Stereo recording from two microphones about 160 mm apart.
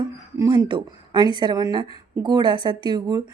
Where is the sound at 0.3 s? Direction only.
25° right (ahead or behind).